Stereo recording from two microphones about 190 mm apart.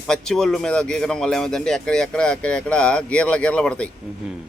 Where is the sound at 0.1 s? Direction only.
5° left (ahead or behind).